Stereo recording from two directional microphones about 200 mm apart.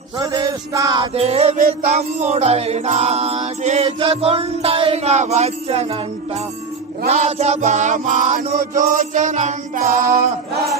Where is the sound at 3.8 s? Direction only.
25° right (ahead or behind).